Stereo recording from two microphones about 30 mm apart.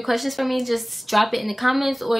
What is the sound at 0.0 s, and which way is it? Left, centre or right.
A woman's voice, centre.